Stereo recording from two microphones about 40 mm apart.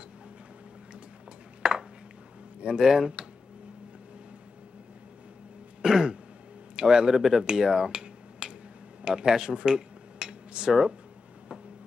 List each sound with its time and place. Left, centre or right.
1.6 s dishes: centre
2.8 s speech: centre
5.8 s throat clearing: centre
6.8 s speech: centre
7.4 s a sound: centre
9.0 s speech: centre
9.6 s dishes: centre